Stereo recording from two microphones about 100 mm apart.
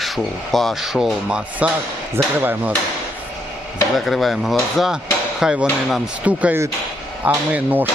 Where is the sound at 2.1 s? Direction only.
20° right (ahead or behind).